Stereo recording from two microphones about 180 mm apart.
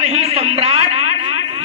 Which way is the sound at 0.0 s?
35° right (ahead or behind).